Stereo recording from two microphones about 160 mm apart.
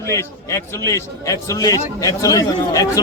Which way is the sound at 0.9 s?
20° left (ahead or behind).